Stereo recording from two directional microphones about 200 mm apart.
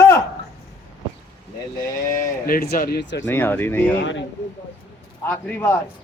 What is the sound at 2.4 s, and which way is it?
Speech, 50° left (ahead or behind).